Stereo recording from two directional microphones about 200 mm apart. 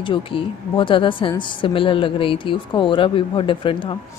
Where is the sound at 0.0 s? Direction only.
25° left (ahead or behind).